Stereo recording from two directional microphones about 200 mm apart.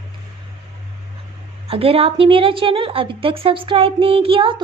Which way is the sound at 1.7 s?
30° right (ahead or behind).